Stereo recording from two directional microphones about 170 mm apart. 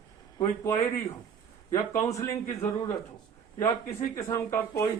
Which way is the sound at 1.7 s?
20° left (ahead or behind).